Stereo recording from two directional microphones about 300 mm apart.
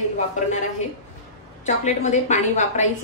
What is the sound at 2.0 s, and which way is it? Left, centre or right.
Speech, left.